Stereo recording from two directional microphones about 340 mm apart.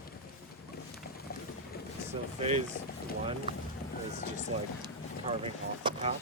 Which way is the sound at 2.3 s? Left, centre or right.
Centre.